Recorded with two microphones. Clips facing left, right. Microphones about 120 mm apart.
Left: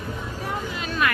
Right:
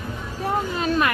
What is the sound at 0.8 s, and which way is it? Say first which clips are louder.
Vehicle: right 7 dB; 40° right (ahead or behind).